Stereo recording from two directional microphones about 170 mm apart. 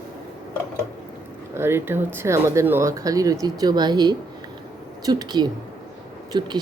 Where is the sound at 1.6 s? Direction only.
15° right (ahead or behind).